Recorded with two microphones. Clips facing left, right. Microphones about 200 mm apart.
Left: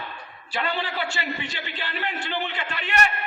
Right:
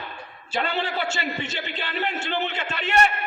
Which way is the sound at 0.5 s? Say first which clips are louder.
Right 2 dB; 25° right (ahead or behind).